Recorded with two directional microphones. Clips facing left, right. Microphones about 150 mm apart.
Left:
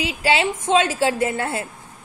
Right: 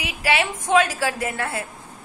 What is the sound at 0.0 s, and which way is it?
A woman's voice, 25° left (ahead or behind).